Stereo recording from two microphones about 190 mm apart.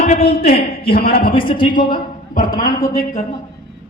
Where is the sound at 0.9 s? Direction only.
50° left (ahead or behind).